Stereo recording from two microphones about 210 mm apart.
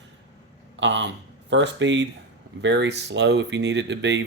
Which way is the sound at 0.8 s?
60° right (ahead or behind).